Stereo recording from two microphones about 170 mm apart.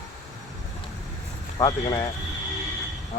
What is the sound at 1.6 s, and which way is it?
Speech, 25° left (ahead or behind).